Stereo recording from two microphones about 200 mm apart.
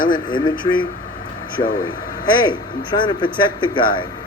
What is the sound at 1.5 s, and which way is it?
Speech, 45° left (ahead or behind).